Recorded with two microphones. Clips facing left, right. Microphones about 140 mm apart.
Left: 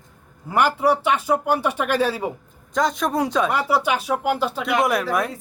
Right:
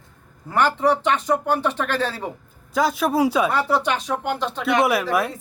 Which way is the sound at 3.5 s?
10° left (ahead or behind).